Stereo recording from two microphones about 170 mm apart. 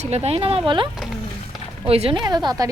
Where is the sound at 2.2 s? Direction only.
25° right (ahead or behind).